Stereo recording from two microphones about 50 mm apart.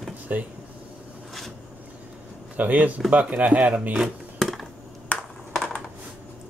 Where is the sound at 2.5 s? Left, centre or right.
Right.